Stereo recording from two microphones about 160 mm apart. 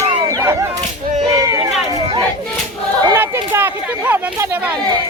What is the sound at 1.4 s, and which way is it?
Run, 20° right (ahead or behind).